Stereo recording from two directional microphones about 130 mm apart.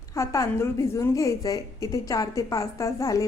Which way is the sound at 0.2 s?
25° left (ahead or behind).